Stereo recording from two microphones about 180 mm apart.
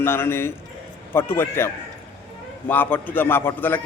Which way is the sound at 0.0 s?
15° left (ahead or behind).